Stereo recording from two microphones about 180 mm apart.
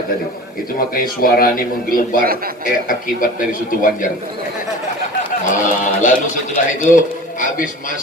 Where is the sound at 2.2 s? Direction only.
55° right (ahead or behind).